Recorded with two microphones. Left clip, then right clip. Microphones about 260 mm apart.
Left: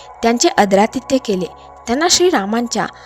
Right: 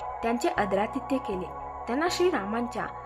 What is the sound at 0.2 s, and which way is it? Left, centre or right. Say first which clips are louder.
Speech: left 14 dB; left.